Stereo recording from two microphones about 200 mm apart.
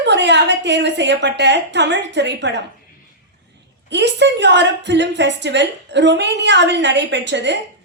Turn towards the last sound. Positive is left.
turn(degrees=-60)  # may be behind; listen again after turning